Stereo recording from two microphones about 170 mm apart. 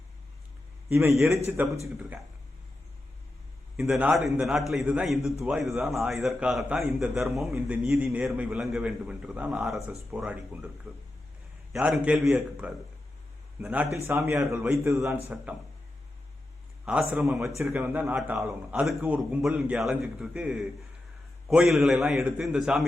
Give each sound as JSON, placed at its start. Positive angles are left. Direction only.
{"t": 0.9, "sound": "a man's voice", "side_deg": -15}
{"t": 1.5, "sound": "a man's voice", "side_deg": -5}
{"t": 3.8, "sound": "a man's voice", "side_deg": -5}
{"t": 16.8, "sound": "a man's voice", "side_deg": -5}